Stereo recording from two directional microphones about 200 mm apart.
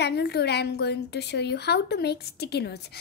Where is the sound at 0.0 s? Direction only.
55° left (ahead or behind).